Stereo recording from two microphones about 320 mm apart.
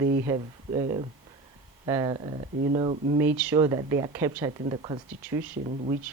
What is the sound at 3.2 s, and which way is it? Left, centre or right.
Speech, centre.